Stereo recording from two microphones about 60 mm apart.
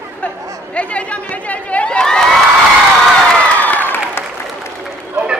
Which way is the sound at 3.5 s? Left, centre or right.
Left.